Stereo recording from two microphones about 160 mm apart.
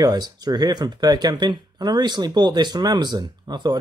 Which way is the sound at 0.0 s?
25° right (ahead or behind).